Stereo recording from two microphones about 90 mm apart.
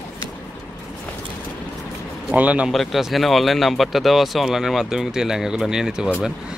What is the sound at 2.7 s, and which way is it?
Speech, centre (ahead or behind).